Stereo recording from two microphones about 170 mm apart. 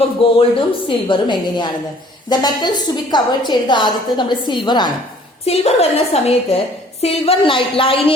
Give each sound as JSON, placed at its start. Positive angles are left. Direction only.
{"t": 0.2, "sound": "a woman's voice", "side_deg": 30}
{"t": 5.5, "sound": "a woman's voice", "side_deg": 35}